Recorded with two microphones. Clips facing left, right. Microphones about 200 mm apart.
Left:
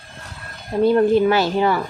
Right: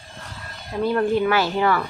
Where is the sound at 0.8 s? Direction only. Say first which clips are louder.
Left 5 dB; 20° left (ahead or behind).